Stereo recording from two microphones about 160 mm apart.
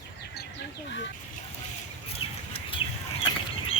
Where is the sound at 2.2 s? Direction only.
35° left (ahead or behind).